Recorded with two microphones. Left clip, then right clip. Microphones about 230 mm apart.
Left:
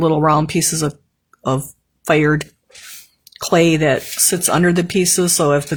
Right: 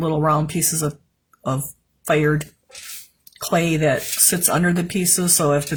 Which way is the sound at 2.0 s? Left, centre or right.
Left.